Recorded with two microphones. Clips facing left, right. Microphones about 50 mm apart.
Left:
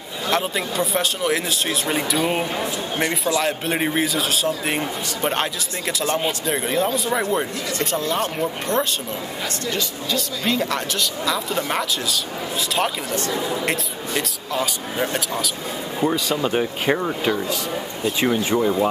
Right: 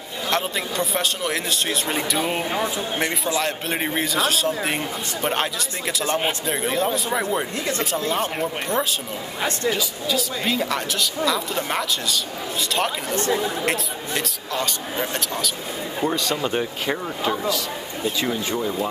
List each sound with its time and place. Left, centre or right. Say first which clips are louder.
0.3 s speech: left 2 dB; centre
13.1 s speech: right 2 dB; right
13.4 s speech: even; centre
16.8 s speech: left 5 dB; centre
18.2 s speech: left 8 dB; centre